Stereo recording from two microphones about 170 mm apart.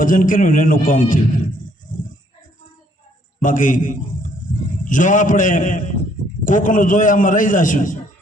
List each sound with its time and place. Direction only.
0.0 s a man's voice: 50° left (ahead or behind)
1.9 s a sound: 50° left (ahead or behind)
3.4 s a man's voice: 50° left (ahead or behind)